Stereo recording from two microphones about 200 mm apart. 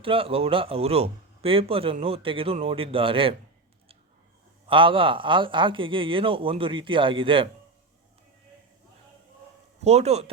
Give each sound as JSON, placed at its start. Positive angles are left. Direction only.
{"t": 0.0, "sound": "speech", "side_deg": -25}
{"t": 4.6, "sound": "speech", "side_deg": -25}
{"t": 9.8, "sound": "speech", "side_deg": -30}